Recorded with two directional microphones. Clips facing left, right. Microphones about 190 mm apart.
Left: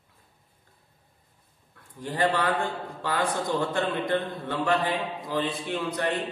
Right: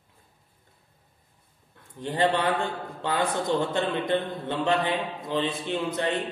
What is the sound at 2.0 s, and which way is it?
A man's voice, 25° right (ahead or behind).